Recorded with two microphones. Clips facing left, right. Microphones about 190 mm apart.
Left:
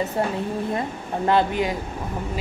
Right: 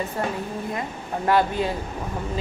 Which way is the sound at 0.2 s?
25° left (ahead or behind).